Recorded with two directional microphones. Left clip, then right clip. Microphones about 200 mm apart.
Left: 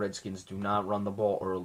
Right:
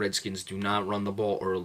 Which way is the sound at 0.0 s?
15° right (ahead or behind).